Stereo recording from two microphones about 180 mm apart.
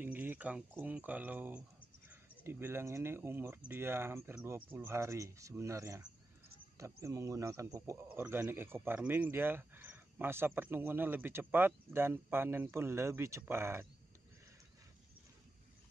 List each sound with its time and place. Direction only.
0.0 s speech: 10° right (ahead or behind)